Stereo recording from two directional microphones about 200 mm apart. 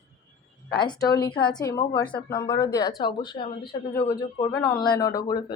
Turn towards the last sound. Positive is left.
turn(degrees=20)  # may be behind; listen again after turning